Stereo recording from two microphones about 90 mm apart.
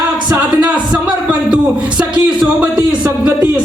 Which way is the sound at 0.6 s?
10° right (ahead or behind).